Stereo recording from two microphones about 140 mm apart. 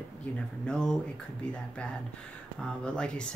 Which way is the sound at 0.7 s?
5° left (ahead or behind).